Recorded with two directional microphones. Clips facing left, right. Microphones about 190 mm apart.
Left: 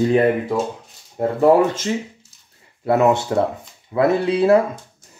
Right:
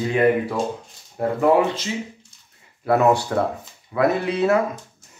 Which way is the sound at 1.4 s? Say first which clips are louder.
Left 4 dB; 45° left (ahead or behind).